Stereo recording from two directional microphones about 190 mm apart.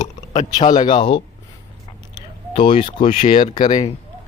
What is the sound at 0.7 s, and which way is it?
Speech, 25° left (ahead or behind).